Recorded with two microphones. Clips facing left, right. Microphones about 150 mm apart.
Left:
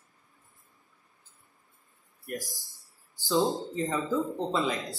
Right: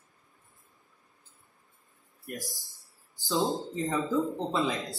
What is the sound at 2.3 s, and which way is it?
Speech, centre (ahead or behind).